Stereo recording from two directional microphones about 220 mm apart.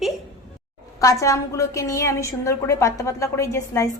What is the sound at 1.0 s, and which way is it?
A woman's voice, 15° left (ahead or behind).